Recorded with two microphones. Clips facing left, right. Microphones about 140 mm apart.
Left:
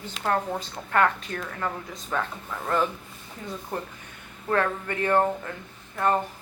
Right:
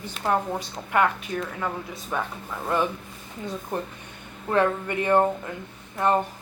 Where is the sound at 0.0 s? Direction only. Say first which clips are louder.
Right 1 dB; 10° right (ahead or behind).